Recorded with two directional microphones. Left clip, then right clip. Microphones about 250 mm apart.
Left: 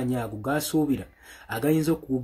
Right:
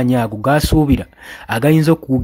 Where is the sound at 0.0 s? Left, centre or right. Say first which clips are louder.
Right 13 dB; right.